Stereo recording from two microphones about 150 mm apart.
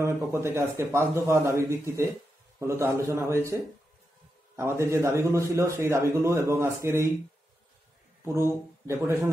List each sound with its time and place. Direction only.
0.0 s a man's voice: 15° right (ahead or behind)
4.6 s a man's voice: 15° right (ahead or behind)
8.3 s speech: 20° right (ahead or behind)